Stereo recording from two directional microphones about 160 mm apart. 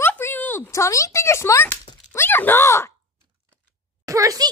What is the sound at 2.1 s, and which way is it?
Speech, 10° left (ahead or behind).